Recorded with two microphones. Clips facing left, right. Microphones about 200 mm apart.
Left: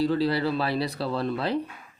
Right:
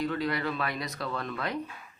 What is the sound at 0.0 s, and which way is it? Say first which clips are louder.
Speech: left 6 dB; 30° left (ahead or behind).